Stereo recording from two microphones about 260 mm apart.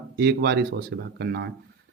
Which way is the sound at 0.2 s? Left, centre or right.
Right.